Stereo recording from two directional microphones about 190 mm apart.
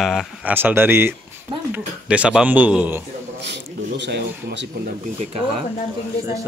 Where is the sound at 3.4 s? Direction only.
65° right (ahead or behind).